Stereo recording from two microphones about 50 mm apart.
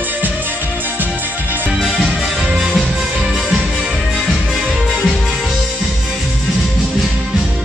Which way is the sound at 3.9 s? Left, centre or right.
Centre.